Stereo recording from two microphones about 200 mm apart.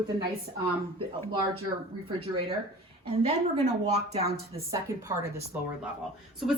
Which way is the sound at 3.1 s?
30° right (ahead or behind).